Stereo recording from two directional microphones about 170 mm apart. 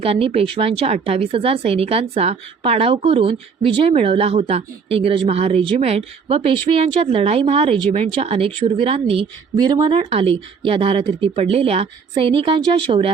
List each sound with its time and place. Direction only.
0.0 s speech: 35° right (ahead or behind)